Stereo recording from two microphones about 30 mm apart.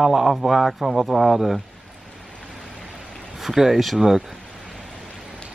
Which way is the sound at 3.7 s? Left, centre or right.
Centre.